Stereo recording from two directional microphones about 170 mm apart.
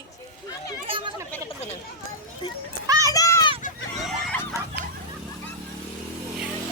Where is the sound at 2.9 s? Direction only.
20° right (ahead or behind).